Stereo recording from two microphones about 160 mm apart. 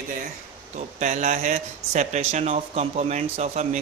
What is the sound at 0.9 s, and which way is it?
Speech, 50° right (ahead or behind).